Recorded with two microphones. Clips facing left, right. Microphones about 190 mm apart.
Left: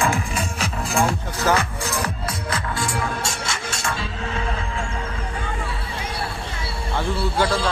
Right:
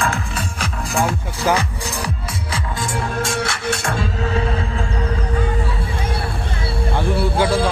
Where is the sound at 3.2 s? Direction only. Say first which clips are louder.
Right 6 dB; 55° right (ahead or behind).